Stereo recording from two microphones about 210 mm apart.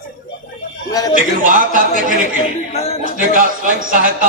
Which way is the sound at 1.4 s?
40° right (ahead or behind).